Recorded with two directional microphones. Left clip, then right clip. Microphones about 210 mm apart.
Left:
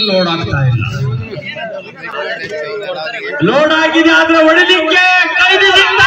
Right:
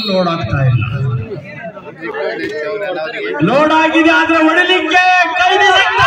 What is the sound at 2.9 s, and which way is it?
A man's voice, 55° right (ahead or behind).